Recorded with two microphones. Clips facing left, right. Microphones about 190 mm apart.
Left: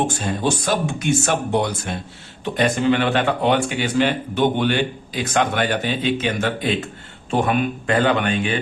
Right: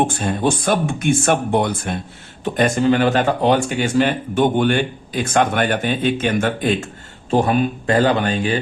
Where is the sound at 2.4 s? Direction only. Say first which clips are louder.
Right 2 dB; 40° right (ahead or behind).